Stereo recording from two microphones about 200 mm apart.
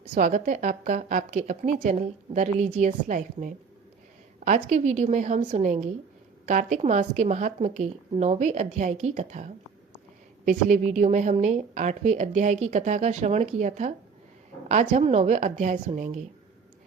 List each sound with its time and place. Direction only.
0.1 s a woman's voice: 40° right (ahead or behind)